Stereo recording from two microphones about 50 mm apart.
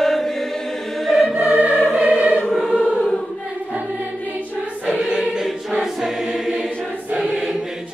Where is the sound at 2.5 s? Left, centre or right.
Centre.